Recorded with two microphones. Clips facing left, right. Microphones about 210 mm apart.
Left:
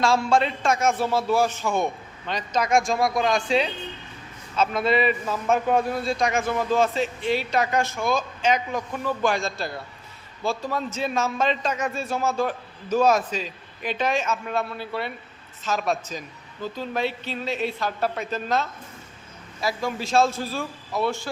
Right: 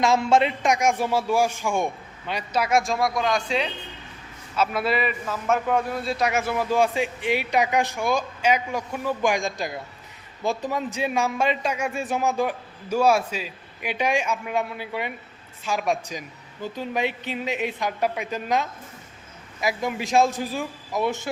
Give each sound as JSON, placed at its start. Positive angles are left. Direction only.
{"t": 0.0, "sound": "a man's voice", "side_deg": -20}
{"t": 3.2, "sound": "speech", "side_deg": 50}
{"t": 4.5, "sound": "a man's voice", "side_deg": -5}
{"t": 4.9, "sound": "a man's voice", "side_deg": 30}
{"t": 6.1, "sound": "a man's voice", "side_deg": -5}